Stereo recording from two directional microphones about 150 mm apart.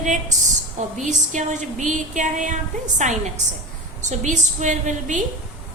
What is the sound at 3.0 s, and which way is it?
Female singing, 50° right (ahead or behind).